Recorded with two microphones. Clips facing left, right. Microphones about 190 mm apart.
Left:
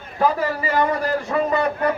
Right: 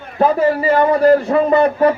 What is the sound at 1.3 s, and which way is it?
Speech, 40° right (ahead or behind).